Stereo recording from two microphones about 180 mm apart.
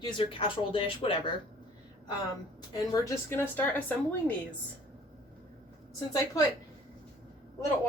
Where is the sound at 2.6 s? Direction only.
25° left (ahead or behind).